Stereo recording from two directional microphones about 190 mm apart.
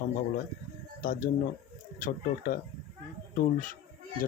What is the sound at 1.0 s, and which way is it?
Speech, 45° left (ahead or behind).